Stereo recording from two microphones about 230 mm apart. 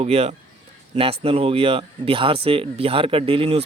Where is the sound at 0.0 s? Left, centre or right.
Right.